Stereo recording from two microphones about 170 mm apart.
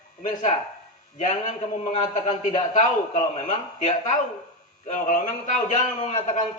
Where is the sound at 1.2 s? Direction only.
45° left (ahead or behind).